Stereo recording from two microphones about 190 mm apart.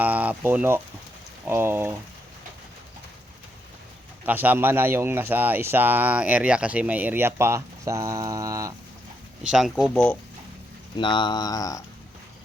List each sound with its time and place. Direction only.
0.0 s speech: 10° right (ahead or behind)
4.3 s speech: 10° right (ahead or behind)
9.4 s speech: 5° right (ahead or behind)
10.9 s speech: 25° left (ahead or behind)